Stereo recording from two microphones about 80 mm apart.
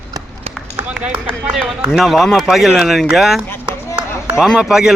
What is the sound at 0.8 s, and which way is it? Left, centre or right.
Run, centre.